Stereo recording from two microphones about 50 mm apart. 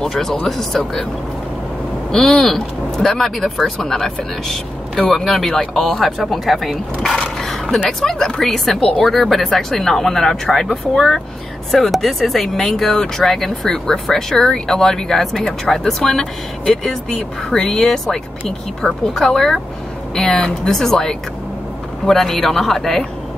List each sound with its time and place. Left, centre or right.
0.1 s speech: centre
2.0 s speech: centre
7.2 s a sound: centre
8.0 s speech: centre